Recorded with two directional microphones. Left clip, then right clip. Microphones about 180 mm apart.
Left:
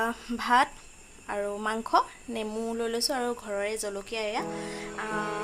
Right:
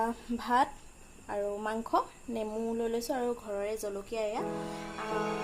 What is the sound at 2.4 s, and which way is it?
Speech, 25° left (ahead or behind).